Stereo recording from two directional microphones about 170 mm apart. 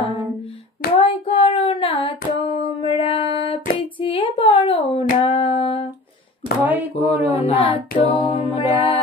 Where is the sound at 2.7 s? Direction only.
30° left (ahead or behind).